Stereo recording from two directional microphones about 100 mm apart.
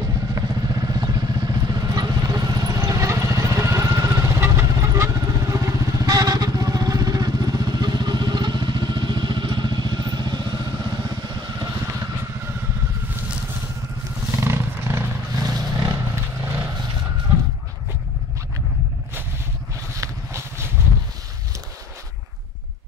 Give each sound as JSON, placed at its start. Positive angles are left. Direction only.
{"t": 0.0, "sound": "vehicle", "side_deg": -35}
{"t": 14.3, "sound": "wild animals", "side_deg": -25}
{"t": 15.3, "sound": "vehicle", "side_deg": -35}
{"t": 20.0, "sound": "vehicle", "side_deg": -25}